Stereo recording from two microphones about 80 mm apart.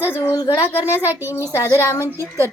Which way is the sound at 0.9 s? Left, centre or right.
Right.